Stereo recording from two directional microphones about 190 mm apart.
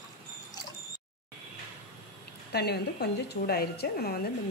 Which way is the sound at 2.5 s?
55° left (ahead or behind).